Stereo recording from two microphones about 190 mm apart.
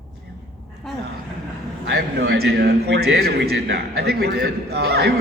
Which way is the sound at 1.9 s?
55° right (ahead or behind).